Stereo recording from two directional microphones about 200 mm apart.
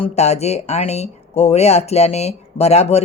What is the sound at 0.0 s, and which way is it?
Speech, 30° left (ahead or behind).